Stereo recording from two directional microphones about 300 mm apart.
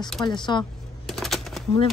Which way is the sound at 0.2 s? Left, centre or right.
Centre.